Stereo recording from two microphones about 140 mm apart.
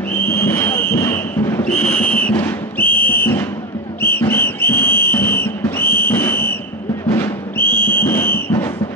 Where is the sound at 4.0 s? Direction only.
15° left (ahead or behind).